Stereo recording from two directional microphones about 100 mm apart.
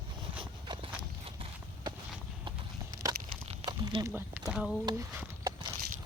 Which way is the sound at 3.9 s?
55° right (ahead or behind).